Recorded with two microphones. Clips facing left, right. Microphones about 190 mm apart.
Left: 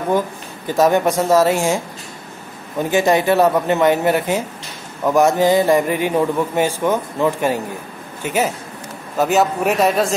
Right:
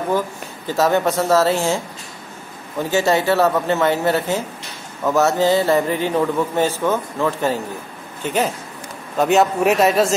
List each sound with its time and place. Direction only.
0.7 s a man's voice: 15° left (ahead or behind)
2.8 s a man's voice: 15° left (ahead or behind); by 10.1 s centre (ahead or behind)